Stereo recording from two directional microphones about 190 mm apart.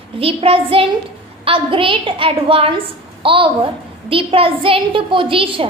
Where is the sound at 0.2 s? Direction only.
30° right (ahead or behind).